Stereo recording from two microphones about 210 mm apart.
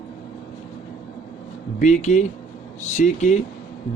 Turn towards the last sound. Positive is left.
turn(degrees=35)  # may be behind; listen again after turning